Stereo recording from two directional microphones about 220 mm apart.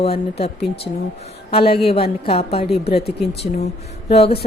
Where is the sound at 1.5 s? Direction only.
25° left (ahead or behind).